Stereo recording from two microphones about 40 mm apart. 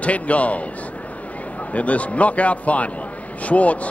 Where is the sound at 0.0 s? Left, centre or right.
Left.